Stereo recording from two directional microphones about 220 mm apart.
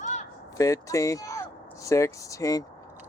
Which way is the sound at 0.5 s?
15° left (ahead or behind).